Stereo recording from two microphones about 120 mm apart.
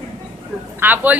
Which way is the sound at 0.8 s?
15° right (ahead or behind).